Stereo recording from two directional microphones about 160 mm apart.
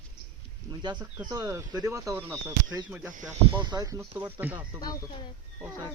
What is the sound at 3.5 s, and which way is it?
Speech, 25° right (ahead or behind).